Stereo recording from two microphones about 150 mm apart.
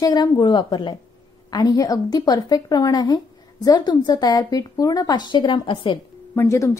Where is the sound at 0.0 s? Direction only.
25° left (ahead or behind).